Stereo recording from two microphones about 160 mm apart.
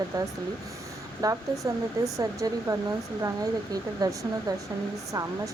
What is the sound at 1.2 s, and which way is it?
Speech, 25° right (ahead or behind).